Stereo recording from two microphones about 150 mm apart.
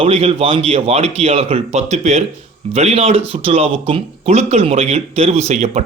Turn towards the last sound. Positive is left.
turn(degrees=-45)  # may be behind; listen again after turning